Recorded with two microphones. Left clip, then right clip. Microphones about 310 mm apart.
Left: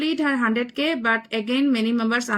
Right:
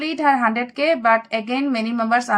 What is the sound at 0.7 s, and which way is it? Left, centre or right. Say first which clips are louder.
Speech: right 5 dB; right.